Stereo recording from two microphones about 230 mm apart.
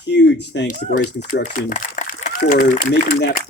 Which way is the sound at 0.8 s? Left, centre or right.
Left.